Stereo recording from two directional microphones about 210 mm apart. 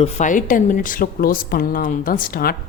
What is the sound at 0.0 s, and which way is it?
Speech, 35° left (ahead or behind).